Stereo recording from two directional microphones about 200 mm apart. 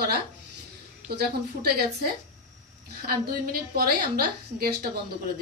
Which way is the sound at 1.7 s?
50° right (ahead or behind).